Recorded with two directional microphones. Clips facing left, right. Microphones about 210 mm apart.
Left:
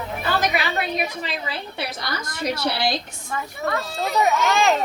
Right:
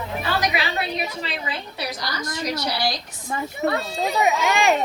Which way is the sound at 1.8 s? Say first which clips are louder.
Right 1 dB; 55° left (ahead or behind).